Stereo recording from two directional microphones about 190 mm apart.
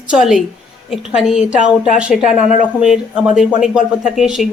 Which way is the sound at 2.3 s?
40° left (ahead or behind).